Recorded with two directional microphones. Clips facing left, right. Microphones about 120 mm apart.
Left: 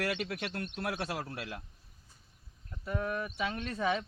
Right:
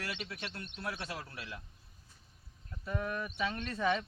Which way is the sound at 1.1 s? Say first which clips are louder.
Left 5 dB; 65° left (ahead or behind).